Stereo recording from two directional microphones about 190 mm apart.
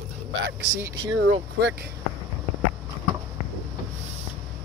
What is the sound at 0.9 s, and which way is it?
Speech, 85° right.